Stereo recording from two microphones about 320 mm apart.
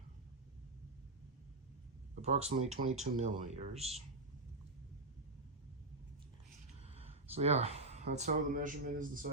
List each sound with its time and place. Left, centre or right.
2.2 s speech: centre
6.8 s speech: centre